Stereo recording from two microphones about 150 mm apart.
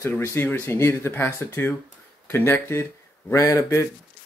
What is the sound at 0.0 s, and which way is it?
Speech, 15° left (ahead or behind).